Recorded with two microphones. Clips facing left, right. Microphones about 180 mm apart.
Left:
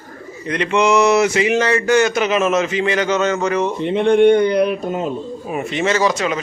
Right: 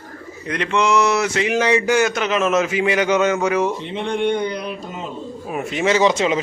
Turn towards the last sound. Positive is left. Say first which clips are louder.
# right 2 dB
turn(degrees=-25)  # may be behind; listen again after turning